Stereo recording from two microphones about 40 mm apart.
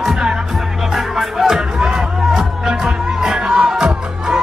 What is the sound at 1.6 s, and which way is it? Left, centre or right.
Music, centre.